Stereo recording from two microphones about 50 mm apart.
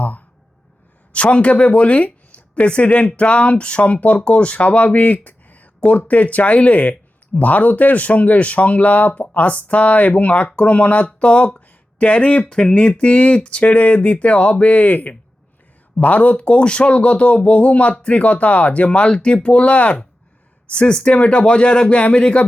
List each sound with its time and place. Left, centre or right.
1.1 s speech: left